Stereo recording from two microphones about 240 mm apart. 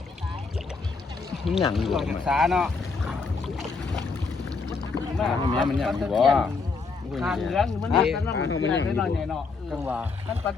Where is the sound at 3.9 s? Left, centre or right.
Centre.